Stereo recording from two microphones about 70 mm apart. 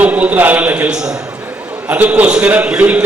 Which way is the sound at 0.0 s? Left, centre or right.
Right.